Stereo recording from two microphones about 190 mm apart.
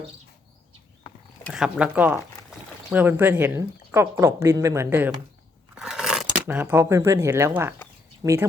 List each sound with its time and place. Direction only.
1.5 s speech: centre (ahead or behind)